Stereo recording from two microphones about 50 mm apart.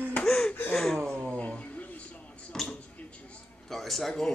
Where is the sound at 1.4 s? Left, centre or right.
Left.